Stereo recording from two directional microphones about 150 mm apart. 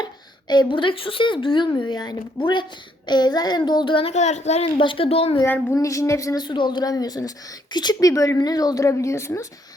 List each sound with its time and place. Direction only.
0.0 s a woman's voice: 30° left (ahead or behind)
4.1 s a woman's voice: 50° left (ahead or behind)
4.8 s speech: 35° left (ahead or behind)
5.7 s a woman's voice: 20° left (ahead or behind)